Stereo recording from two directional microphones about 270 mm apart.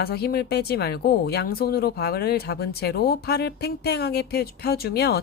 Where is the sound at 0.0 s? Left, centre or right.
Left.